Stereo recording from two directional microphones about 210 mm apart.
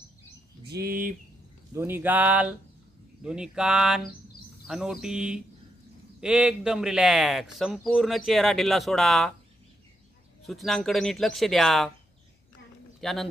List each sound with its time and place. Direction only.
0.7 s speech: 45° right (ahead or behind)
1.7 s speech: 10° right (ahead or behind)
10.4 s speech: centre (ahead or behind)
13.0 s speech: centre (ahead or behind)